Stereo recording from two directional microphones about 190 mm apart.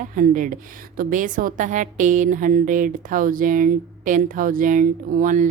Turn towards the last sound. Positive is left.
turn(degrees=-45)  # may be behind; listen again after turning